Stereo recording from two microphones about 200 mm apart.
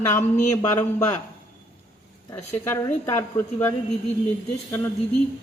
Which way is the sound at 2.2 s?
15° left (ahead or behind).